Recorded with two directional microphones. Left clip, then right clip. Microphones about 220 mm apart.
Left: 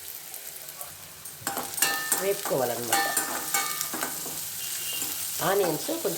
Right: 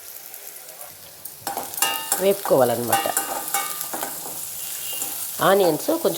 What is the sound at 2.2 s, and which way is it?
Speech, 35° right (ahead or behind).